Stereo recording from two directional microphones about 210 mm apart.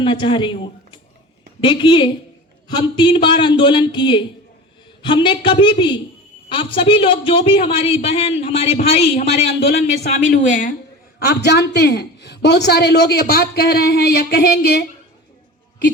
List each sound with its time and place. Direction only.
0.0 s a man's voice: 20° left (ahead or behind); by 10.7 s 35° left (ahead or behind)
11.2 s a woman's voice: 50° left (ahead or behind)